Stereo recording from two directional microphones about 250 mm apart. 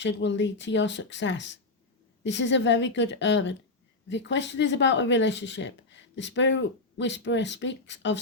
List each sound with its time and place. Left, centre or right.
0.0 s speech: left